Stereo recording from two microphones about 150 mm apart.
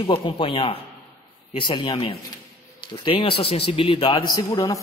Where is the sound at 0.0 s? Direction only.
35° left (ahead or behind).